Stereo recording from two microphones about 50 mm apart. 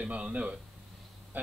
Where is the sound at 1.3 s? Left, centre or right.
Right.